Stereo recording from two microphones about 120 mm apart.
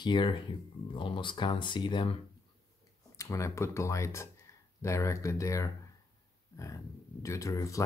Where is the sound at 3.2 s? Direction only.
25° left (ahead or behind).